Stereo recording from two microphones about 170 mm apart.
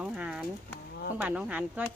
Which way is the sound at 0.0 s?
5° right (ahead or behind).